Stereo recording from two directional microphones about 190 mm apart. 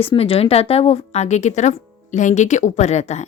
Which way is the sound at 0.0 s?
30° left (ahead or behind).